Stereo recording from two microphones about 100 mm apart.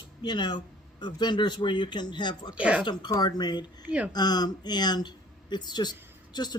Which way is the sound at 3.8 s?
15° right (ahead or behind).